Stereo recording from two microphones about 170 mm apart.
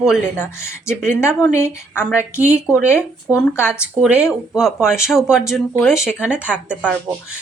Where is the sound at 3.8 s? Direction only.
5° right (ahead or behind).